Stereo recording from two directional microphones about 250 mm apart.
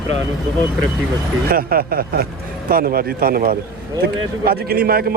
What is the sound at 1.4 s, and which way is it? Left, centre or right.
A man's voice, right.